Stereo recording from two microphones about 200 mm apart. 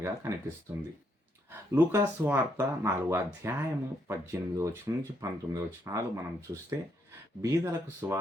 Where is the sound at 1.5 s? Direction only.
15° right (ahead or behind).